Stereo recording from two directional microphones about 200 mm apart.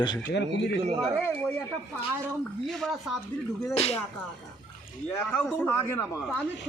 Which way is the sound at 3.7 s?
30° left (ahead or behind).